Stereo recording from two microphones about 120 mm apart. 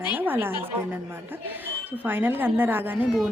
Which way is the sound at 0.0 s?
15° right (ahead or behind).